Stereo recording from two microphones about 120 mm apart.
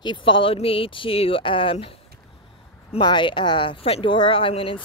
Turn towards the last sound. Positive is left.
turn(degrees=50)  # may be behind; listen again after turning